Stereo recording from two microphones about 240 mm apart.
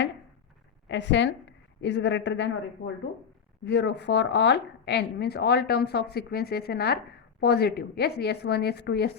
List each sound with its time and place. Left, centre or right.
0.9 s a woman's voice: left